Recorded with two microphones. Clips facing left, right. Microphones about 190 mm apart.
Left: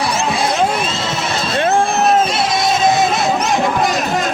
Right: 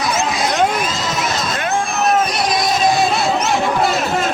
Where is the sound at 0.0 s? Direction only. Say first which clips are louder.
Left 1 dB; 30° left (ahead or behind).